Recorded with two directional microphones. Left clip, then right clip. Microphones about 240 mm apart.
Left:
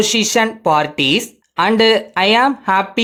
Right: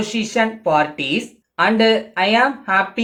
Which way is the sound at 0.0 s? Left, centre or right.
Left.